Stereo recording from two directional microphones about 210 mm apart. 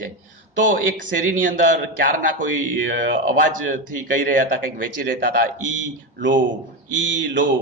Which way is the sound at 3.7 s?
40° right (ahead or behind).